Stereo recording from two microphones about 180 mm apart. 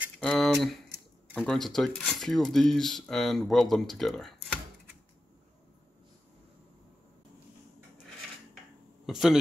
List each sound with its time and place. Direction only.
0.2 s speech: 5° left (ahead or behind)
9.0 s speech: centre (ahead or behind)